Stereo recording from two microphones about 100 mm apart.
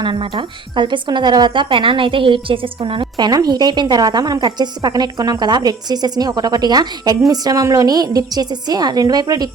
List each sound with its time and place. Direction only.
0.0 s a woman's voice: 55° right (ahead or behind)